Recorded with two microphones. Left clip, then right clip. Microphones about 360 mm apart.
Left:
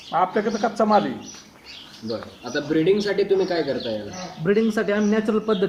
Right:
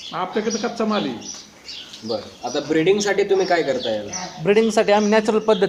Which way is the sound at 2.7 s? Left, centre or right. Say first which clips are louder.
Right 2 dB; centre.